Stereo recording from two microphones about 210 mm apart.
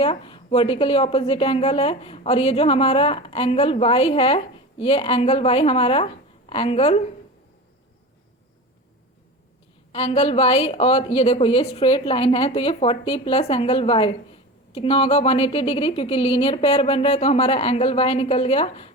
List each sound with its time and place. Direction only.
0.0 s a woman's voice: 25° left (ahead or behind)
9.9 s a woman's voice: 30° left (ahead or behind)